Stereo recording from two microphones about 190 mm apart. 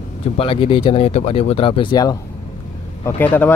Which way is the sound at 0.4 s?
30° left (ahead or behind).